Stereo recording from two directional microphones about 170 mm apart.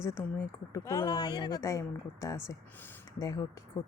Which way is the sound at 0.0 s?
15° left (ahead or behind).